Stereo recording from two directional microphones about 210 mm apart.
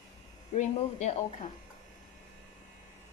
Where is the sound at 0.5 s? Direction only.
35° left (ahead or behind).